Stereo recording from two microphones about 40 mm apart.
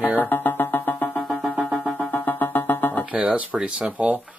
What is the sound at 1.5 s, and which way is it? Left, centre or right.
Music, right.